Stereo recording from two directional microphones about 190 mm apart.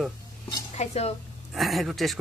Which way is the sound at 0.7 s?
35° left (ahead or behind).